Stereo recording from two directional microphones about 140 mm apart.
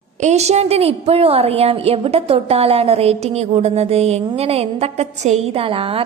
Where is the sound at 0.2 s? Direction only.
55° right (ahead or behind).